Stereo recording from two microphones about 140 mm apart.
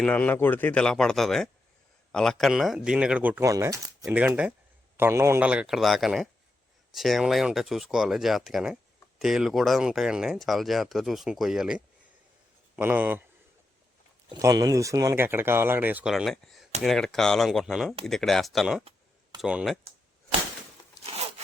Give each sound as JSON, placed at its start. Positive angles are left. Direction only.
{"t": 0.0, "sound": "speech", "side_deg": 10}
{"t": 3.5, "sound": "speech", "side_deg": -25}
{"t": 4.1, "sound": "speech", "side_deg": -10}
{"t": 14.3, "sound": "speech", "side_deg": -25}